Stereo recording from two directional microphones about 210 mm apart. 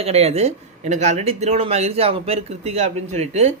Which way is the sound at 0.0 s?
30° right (ahead or behind).